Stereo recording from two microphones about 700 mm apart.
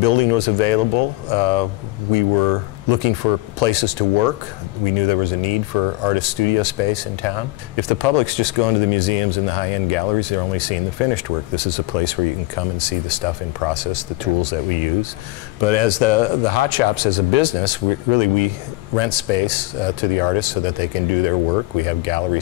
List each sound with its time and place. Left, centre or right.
0.0 s speech: left
15.6 s speech: left